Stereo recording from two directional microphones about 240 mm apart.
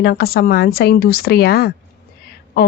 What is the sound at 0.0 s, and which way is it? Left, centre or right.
Speech, left.